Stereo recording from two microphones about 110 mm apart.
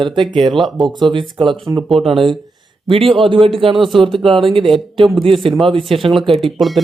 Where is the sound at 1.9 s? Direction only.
60° right (ahead or behind).